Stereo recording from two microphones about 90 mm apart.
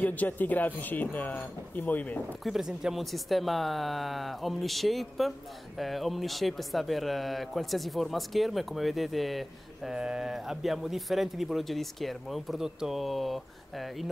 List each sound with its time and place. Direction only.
0.0 s speech: 20° left (ahead or behind)
2.4 s a man's voice: 5° right (ahead or behind)